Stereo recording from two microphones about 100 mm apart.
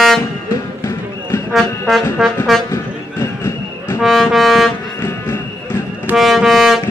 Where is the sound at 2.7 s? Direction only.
25° left (ahead or behind).